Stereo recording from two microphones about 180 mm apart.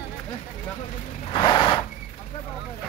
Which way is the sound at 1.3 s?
25° left (ahead or behind).